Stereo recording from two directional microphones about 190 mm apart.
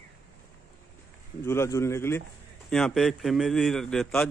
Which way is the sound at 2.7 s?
Centre (ahead or behind).